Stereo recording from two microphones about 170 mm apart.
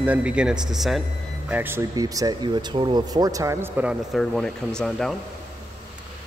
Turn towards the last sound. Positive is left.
turn(degrees=5)  # may be behind; listen again after turning